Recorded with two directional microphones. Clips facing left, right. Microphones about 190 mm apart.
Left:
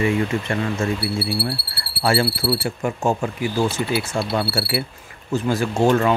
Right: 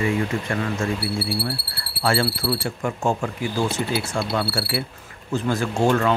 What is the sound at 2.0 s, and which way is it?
Speech, 15° left (ahead or behind).